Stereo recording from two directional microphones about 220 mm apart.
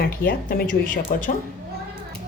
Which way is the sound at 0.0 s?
40° left (ahead or behind).